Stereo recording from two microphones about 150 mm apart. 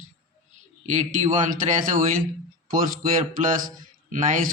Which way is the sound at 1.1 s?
60° right (ahead or behind).